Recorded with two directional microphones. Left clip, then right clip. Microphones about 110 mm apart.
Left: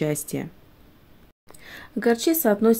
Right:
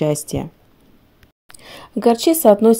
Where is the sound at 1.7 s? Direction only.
55° right (ahead or behind).